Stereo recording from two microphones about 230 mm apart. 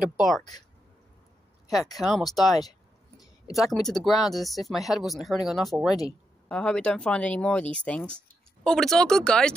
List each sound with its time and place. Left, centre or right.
0.0 s speech: centre
0.4 s speech: centre
2.0 s speech: centre